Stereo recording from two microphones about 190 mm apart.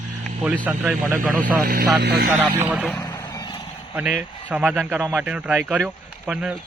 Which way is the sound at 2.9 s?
20° left (ahead or behind).